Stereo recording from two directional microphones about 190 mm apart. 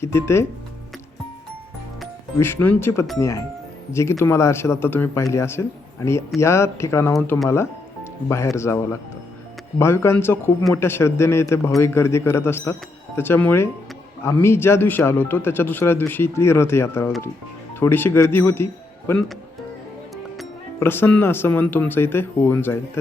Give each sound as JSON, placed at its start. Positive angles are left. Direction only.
{"t": 0.0, "sound": "a man's voice", "side_deg": 15}
{"t": 2.4, "sound": "a man's voice", "side_deg": 10}
{"t": 20.7, "sound": "a man's voice", "side_deg": 10}